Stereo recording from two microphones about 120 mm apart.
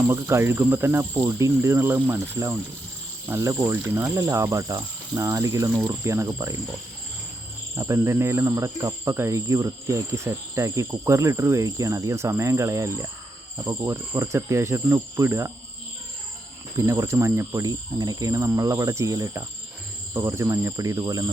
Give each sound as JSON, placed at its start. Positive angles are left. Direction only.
{"t": 0.0, "sound": "speech", "side_deg": -20}
{"t": 7.8, "sound": "speech", "side_deg": -25}
{"t": 16.7, "sound": "speech", "side_deg": -25}